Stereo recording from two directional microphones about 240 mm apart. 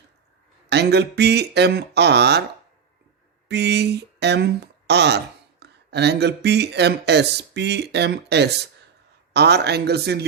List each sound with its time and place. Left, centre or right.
0.7 s speech: right
3.5 s speech: right